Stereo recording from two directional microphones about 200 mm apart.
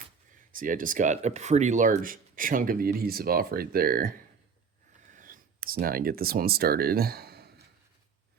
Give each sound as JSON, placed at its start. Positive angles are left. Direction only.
{"t": 0.5, "sound": "speech", "side_deg": -40}
{"t": 5.1, "sound": "speech", "side_deg": -45}